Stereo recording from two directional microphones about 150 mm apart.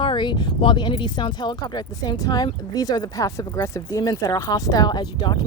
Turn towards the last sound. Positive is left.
turn(degrees=30)  # may be behind; listen again after turning